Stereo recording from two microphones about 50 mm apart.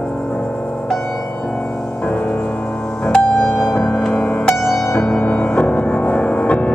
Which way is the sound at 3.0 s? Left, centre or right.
Centre.